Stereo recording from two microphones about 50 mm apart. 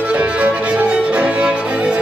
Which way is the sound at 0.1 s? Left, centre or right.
Right.